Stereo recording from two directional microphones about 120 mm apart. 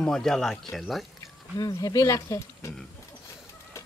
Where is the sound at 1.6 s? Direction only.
30° left (ahead or behind).